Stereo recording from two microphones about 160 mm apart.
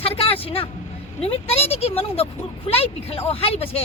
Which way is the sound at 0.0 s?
40° left (ahead or behind).